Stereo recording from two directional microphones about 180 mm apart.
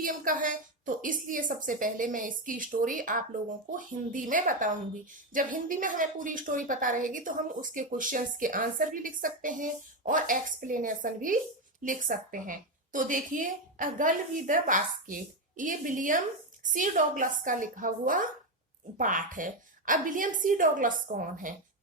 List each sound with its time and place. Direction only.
0.0 s a woman's voice: 50° right (ahead or behind)